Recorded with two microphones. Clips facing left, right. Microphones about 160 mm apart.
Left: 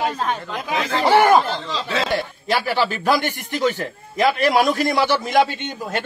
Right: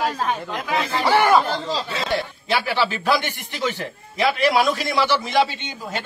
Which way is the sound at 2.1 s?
45° left (ahead or behind).